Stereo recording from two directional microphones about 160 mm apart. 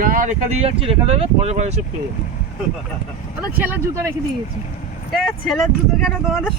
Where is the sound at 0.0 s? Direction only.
55° right (ahead or behind).